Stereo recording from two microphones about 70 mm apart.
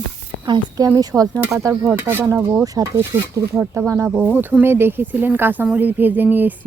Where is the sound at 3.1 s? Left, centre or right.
Right.